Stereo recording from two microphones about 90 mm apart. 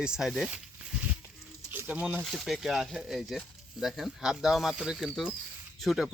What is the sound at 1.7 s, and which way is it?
Speech, 15° right (ahead or behind).